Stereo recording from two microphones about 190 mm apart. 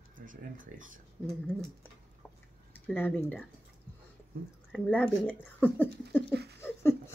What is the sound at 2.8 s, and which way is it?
Speech, 10° left (ahead or behind).